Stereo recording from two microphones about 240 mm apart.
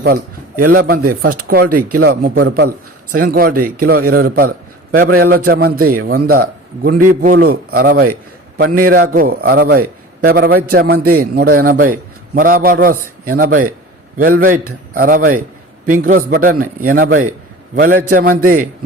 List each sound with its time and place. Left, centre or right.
0.7 s a man's voice: right
1.8 s speech: right
2.0 s a man's voice: right